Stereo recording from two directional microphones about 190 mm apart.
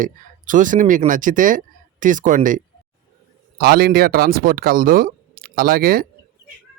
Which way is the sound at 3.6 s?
55° right (ahead or behind).